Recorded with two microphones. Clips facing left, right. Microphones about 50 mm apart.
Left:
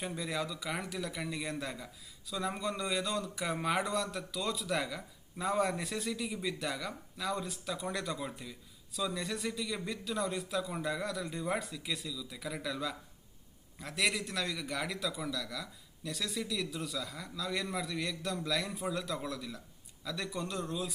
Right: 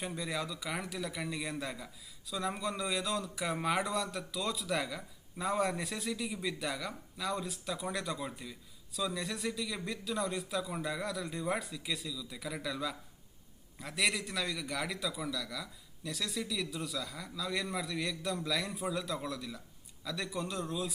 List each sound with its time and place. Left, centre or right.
0.0 s speech: centre